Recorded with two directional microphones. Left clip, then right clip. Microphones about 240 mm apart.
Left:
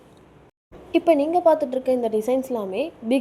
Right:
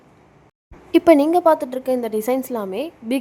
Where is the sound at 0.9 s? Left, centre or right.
Right.